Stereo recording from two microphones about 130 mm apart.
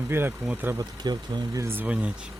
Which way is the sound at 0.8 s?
30° right (ahead or behind).